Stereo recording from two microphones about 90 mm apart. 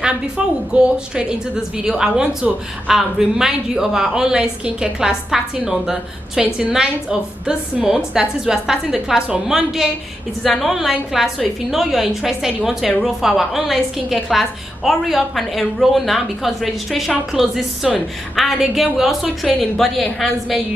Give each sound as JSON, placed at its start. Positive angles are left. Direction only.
{"t": 0.7, "sound": "a woman's voice", "side_deg": -10}